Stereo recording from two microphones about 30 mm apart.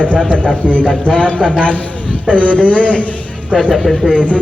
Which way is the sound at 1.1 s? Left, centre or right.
Left.